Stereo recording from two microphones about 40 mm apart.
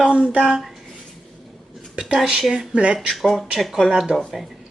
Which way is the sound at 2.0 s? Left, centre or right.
Centre.